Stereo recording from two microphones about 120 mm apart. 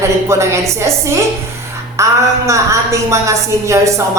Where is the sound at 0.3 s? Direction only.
25° right (ahead or behind).